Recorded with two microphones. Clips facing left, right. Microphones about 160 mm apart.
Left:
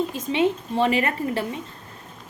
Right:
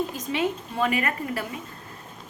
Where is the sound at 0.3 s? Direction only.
25° left (ahead or behind).